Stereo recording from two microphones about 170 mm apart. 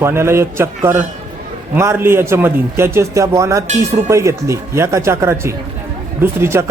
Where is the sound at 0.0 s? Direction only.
15° right (ahead or behind).